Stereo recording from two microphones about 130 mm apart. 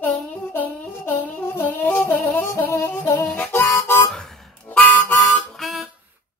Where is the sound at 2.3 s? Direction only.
15° left (ahead or behind).